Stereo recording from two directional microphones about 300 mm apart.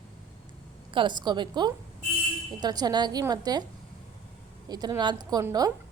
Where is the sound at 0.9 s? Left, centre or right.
Centre.